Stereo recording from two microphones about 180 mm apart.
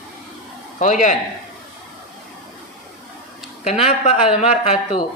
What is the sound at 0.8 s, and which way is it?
Speech, 40° left (ahead or behind).